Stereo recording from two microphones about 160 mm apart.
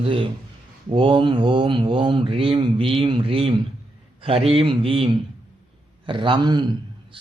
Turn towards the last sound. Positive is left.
turn(degrees=-25)  # may be behind; listen again after turning